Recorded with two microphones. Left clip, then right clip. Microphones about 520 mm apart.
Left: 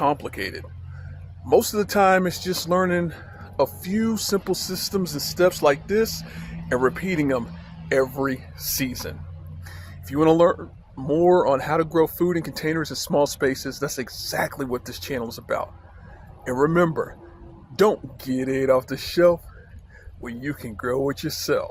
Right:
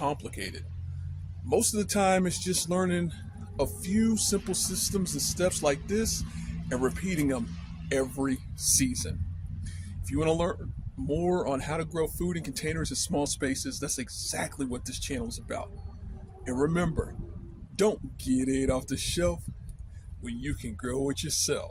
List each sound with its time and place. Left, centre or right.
0.0 s speech: right
1.5 s speech: right
9.6 s a sound: right
11.1 s speech: right